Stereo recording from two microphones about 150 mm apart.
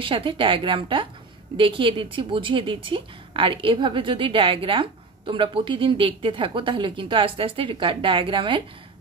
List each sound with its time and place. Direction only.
0.0 s a woman's voice: 35° right (ahead or behind)